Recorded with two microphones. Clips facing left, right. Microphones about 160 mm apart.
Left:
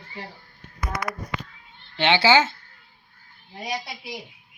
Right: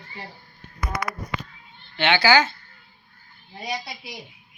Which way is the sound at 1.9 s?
30° left (ahead or behind).